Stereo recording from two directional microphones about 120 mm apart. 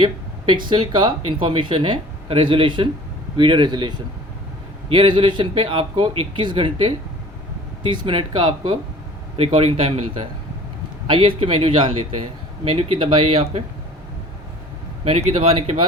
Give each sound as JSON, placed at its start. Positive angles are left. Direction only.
{"t": 0.5, "sound": "a man's voice", "side_deg": -40}
{"t": 9.4, "sound": "speech", "side_deg": -55}
{"t": 11.0, "sound": "speech", "side_deg": -45}
{"t": 15.0, "sound": "speech", "side_deg": -60}